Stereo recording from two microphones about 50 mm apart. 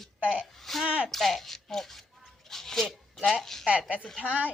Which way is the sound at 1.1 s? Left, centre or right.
Centre.